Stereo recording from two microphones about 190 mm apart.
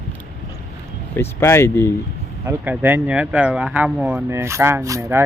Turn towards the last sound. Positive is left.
turn(degrees=-15)  # may be behind; listen again after turning